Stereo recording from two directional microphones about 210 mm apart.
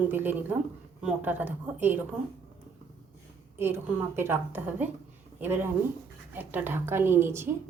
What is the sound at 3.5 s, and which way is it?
A woman's voice, 10° right (ahead or behind).